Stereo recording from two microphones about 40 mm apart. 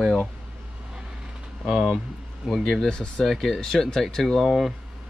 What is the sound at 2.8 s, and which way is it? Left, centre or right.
Speech, left.